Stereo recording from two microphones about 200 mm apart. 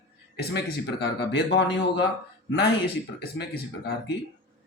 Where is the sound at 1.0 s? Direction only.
55° left (ahead or behind).